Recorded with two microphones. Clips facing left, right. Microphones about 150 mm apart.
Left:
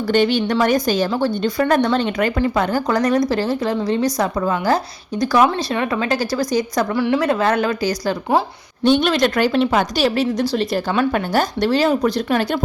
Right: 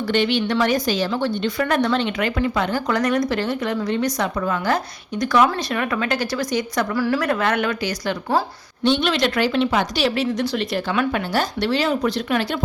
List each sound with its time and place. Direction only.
0.1 s a woman's voice: 45° left (ahead or behind)
7.0 s a woman's voice: 25° left (ahead or behind); by 12.5 s 45° left (ahead or behind)